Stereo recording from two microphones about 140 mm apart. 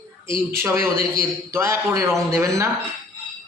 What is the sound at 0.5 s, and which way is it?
A woman's voice, 15° right (ahead or behind).